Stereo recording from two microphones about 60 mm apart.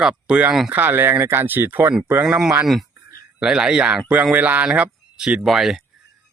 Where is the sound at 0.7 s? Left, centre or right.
Right.